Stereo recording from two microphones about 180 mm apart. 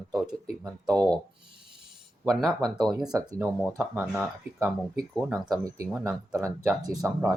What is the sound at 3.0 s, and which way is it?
Speech, 20° right (ahead or behind).